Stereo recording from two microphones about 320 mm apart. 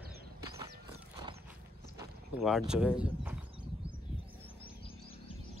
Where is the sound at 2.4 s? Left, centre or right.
Centre.